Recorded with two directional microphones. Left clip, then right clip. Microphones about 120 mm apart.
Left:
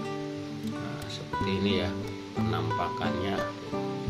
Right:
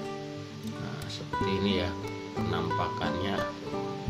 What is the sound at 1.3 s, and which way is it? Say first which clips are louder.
Speech: even; 5° right (ahead or behind).